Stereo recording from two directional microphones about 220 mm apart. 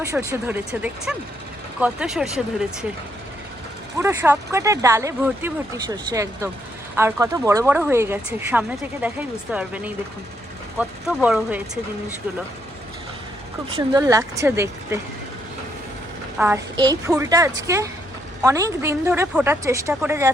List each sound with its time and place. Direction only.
0.0 s speech: 15° right (ahead or behind)
3.9 s speech: 10° right (ahead or behind)
13.7 s speech: 20° right (ahead or behind)
16.4 s speech: 10° right (ahead or behind)